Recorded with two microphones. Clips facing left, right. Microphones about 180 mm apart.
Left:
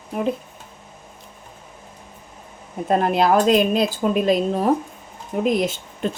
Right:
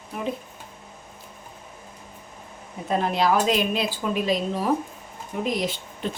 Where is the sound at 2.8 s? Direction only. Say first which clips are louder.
Left 4 dB; 50° left (ahead or behind).